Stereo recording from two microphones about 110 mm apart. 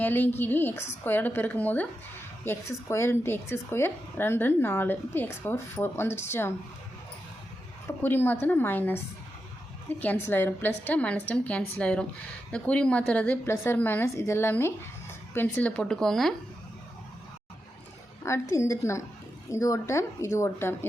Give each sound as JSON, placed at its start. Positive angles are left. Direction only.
{"t": 0.0, "sound": "a woman's voice", "side_deg": 20}
{"t": 8.0, "sound": "a woman's voice", "side_deg": 20}
{"t": 10.0, "sound": "a woman's voice", "side_deg": 15}
{"t": 18.3, "sound": "a woman's voice", "side_deg": 25}